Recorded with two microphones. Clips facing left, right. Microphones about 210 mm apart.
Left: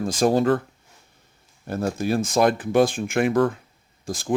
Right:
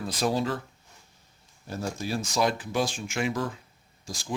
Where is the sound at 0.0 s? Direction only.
45° left (ahead or behind).